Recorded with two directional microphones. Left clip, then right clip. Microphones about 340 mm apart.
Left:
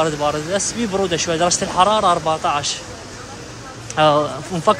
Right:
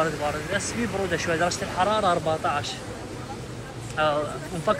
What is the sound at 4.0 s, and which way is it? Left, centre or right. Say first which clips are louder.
Speech: left 9 dB; centre.